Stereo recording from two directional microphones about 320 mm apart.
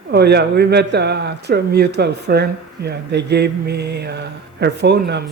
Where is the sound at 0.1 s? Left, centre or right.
Right.